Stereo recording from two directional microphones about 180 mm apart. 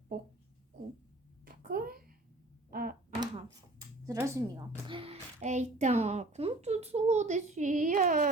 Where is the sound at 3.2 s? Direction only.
20° right (ahead or behind).